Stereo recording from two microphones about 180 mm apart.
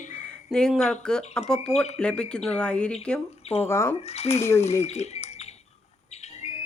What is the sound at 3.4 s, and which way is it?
Speech, 35° left (ahead or behind).